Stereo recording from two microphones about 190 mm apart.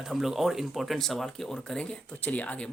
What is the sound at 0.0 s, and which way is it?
Speech, centre (ahead or behind).